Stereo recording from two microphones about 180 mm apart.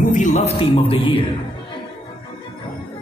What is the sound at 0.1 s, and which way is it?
Speech, 45° left (ahead or behind).